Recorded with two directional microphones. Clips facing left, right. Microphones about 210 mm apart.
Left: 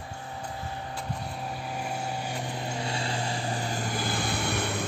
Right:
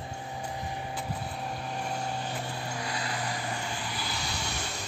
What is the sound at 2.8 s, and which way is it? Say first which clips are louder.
Vehicle: left 3 dB; 25° left (ahead or behind).